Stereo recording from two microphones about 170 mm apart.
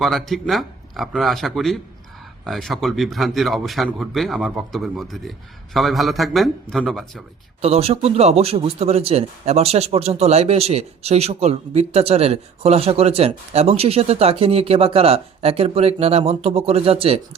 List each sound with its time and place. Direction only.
0.0 s speech: centre (ahead or behind)
7.6 s a man's voice: 35° right (ahead or behind)